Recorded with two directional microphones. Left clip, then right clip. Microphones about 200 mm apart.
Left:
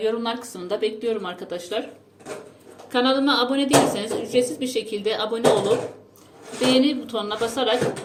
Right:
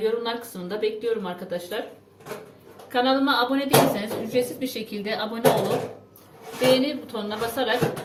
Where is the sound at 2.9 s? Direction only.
35° left (ahead or behind).